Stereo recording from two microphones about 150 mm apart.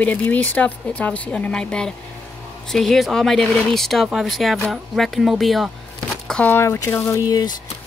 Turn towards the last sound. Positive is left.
turn(degrees=25)  # may be behind; listen again after turning